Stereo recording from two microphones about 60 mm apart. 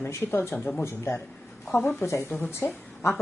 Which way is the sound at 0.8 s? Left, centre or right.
Left.